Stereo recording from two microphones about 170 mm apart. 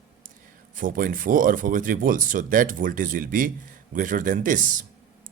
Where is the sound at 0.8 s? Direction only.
55° right (ahead or behind).